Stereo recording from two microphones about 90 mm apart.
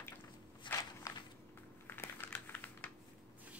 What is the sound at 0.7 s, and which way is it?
Walk, 60° left (ahead or behind).